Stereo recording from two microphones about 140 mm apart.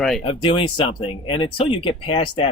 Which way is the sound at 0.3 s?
40° left (ahead or behind).